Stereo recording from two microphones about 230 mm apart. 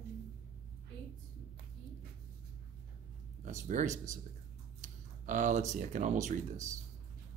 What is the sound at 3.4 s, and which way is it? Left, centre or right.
Speech, right.